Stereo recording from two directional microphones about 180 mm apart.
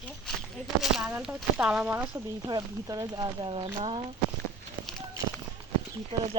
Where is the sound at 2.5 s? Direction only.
20° right (ahead or behind).